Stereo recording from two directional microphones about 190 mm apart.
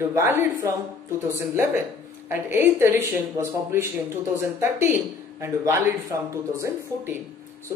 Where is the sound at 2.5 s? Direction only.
15° right (ahead or behind).